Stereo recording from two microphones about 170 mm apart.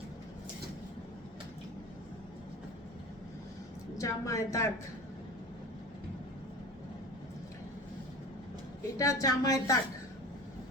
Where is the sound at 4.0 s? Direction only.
20° left (ahead or behind).